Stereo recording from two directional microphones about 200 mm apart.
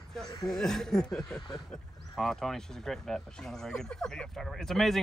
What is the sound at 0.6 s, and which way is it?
Speech, centre (ahead or behind).